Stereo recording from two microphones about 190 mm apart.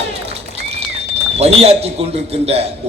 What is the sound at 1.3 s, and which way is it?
A man's voice, 30° right (ahead or behind).